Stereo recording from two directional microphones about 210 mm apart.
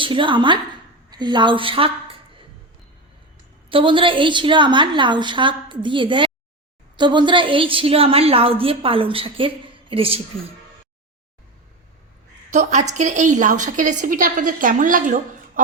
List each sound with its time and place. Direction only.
0.0 s a woman's voice: 25° right (ahead or behind)
3.7 s a woman's voice: 25° right (ahead or behind)
12.5 s a woman's voice: 35° right (ahead or behind)